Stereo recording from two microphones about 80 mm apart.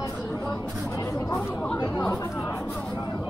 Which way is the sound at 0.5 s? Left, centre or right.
Left.